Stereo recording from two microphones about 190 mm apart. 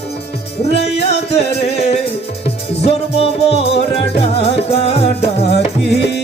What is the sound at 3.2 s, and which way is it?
Music, 30° left (ahead or behind).